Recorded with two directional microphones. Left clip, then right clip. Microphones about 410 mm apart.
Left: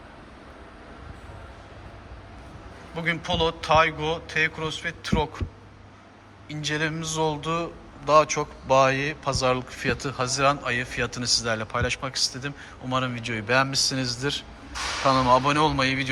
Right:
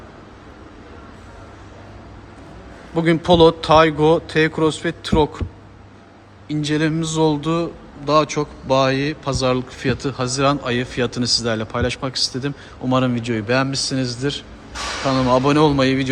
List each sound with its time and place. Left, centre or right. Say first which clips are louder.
2.9 s a man's voice: right 11 dB; centre
6.5 s a man's voice: right 7 dB; centre
15.0 s speech: right 2 dB; centre
15.4 s a man's voice: right 6 dB; centre